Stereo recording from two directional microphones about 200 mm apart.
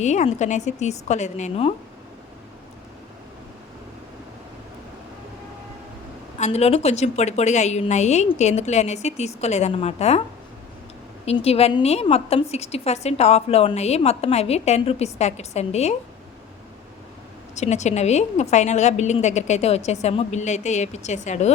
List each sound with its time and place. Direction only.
0.0 s a woman's voice: 35° left (ahead or behind)
6.4 s a woman's voice: 30° left (ahead or behind)
11.3 s a woman's voice: 30° left (ahead or behind)
17.5 s a woman's voice: 35° left (ahead or behind)